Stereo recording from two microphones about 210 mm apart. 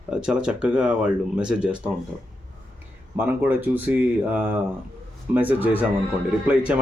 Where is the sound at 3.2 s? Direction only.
10° right (ahead or behind).